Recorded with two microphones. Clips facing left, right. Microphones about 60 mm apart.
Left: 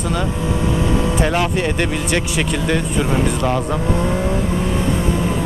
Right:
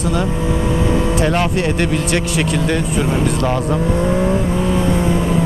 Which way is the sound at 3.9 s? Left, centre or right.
Right.